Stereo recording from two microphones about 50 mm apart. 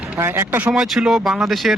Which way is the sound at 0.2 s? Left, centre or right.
Right.